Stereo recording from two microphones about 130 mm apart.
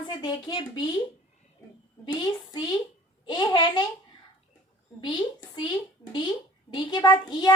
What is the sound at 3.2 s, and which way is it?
Speech, 35° left (ahead or behind).